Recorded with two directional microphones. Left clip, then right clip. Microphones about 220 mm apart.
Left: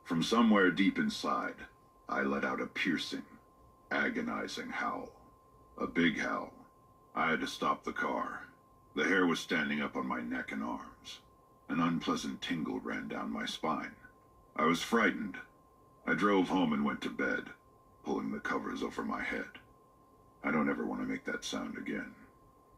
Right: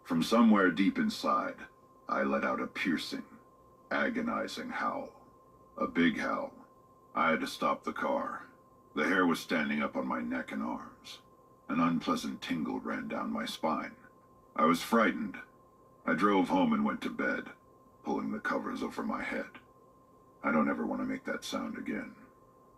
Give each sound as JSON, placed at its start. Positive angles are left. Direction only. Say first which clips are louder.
{"t": 0.1, "sound": "speech", "louder": "right 2 dB", "side_deg": -35}
{"t": 20.4, "sound": "speech", "louder": "right 3 dB", "side_deg": -35}